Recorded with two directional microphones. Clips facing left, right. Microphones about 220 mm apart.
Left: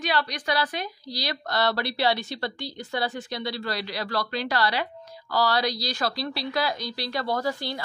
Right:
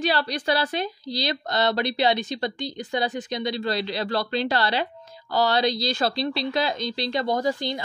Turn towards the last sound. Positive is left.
turn(degrees=-20)  # may be behind; listen again after turning